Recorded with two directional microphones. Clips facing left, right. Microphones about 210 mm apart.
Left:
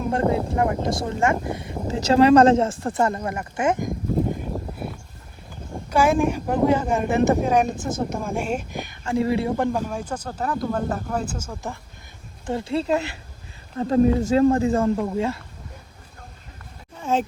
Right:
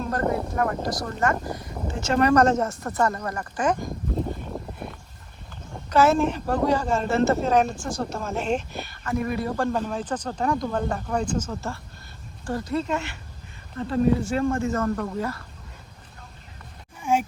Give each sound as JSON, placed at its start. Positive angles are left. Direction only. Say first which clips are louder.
{"t": 0.2, "sound": "speech", "louder": "left 3 dB", "side_deg": 20}
{"t": 9.0, "sound": "speech", "louder": "left 5 dB", "side_deg": 25}
{"t": 9.7, "sound": "speech", "louder": "even", "side_deg": 10}
{"t": 12.5, "sound": "speech", "louder": "left 3 dB", "side_deg": 25}
{"t": 17.0, "sound": "a sound", "louder": "left 1 dB", "side_deg": -10}